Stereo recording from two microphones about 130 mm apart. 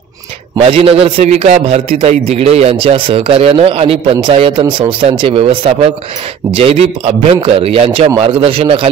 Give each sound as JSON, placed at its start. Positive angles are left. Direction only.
{"t": 0.6, "sound": "a man's voice", "side_deg": -50}